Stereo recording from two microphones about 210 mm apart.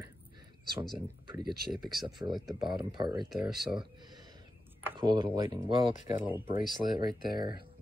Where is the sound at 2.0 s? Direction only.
20° right (ahead or behind).